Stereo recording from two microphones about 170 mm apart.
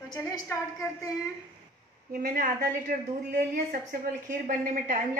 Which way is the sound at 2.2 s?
60° right (ahead or behind).